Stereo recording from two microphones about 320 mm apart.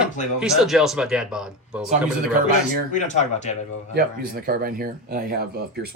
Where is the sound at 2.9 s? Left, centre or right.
Left.